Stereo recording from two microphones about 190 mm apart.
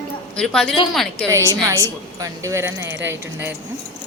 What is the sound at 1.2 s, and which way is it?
A woman's voice, 15° right (ahead or behind).